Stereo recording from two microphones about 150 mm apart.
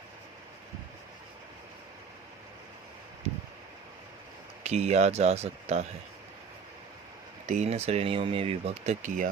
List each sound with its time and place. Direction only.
4.6 s speech: 45° right (ahead or behind)
7.4 s speech: 50° right (ahead or behind)